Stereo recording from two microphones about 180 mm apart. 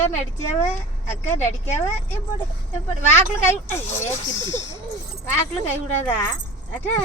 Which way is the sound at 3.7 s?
15° left (ahead or behind).